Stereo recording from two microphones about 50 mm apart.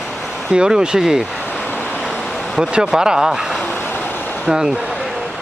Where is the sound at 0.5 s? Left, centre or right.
Centre.